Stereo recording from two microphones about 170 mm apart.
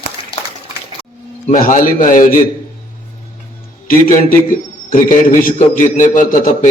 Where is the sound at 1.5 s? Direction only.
50° left (ahead or behind).